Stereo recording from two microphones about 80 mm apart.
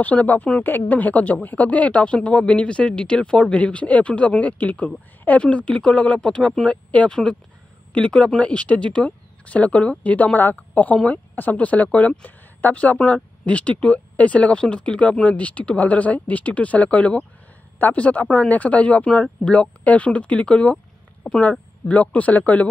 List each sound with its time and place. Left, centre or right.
0.0 s speech: centre